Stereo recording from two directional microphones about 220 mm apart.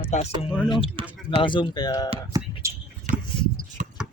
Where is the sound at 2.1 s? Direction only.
15° right (ahead or behind).